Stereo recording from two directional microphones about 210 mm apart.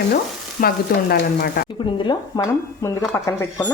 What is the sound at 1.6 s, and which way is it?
Speech, 25° left (ahead or behind).